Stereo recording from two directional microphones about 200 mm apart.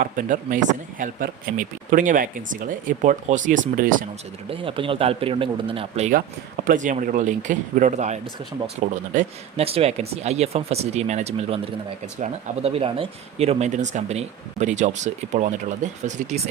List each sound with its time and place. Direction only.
0.0 s speech: 40° right (ahead or behind)
4.4 s speech: 25° right (ahead or behind)